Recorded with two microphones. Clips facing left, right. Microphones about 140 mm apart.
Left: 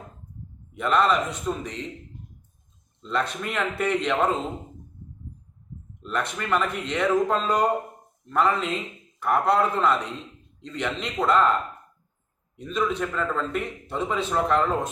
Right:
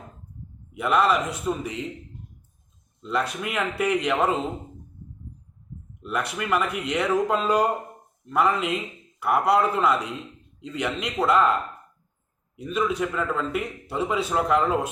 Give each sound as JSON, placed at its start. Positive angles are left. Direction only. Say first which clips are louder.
{"t": 0.7, "sound": "a man's voice", "louder": "even", "side_deg": -5}
{"t": 3.0, "sound": "a man's voice", "louder": "right 1 dB", "side_deg": -10}
{"t": 6.0, "sound": "a man's voice", "louder": "right 1 dB", "side_deg": -10}
{"t": 12.5, "sound": "a man's voice", "louder": "right 1 dB", "side_deg": -10}